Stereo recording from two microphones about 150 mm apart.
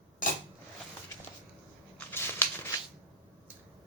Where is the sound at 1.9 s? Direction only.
15° left (ahead or behind).